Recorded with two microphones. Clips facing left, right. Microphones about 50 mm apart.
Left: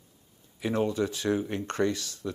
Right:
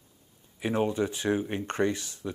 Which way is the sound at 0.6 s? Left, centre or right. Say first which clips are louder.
Even; right.